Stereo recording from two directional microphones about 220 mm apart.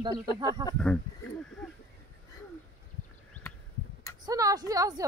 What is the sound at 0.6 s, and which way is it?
Speech, 15° right (ahead or behind).